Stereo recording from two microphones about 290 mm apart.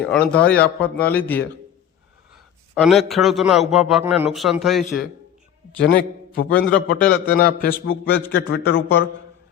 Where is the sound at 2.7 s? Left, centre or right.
Centre.